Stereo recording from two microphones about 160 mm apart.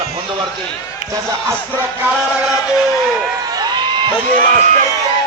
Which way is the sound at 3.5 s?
25° right (ahead or behind).